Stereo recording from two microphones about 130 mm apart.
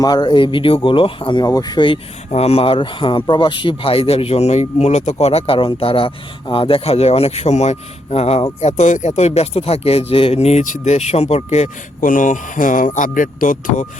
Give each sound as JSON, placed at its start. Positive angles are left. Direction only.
{"t": 0.0, "sound": "speech", "side_deg": 30}
{"t": 2.3, "sound": "speech", "side_deg": 50}
{"t": 8.6, "sound": "speech", "side_deg": 65}